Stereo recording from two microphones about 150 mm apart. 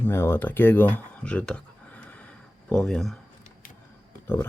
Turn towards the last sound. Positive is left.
turn(degrees=15)  # may be behind; listen again after turning